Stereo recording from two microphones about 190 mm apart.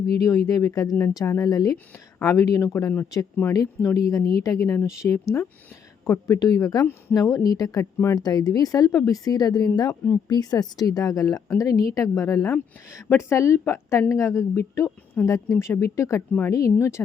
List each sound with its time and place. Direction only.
0.2 s a woman's voice: 15° left (ahead or behind)